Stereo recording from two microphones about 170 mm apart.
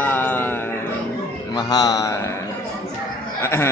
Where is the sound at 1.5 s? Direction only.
25° left (ahead or behind).